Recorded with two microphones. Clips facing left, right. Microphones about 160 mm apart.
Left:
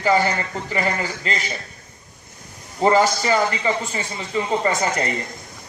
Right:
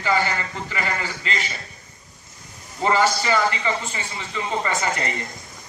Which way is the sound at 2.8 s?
40° left (ahead or behind).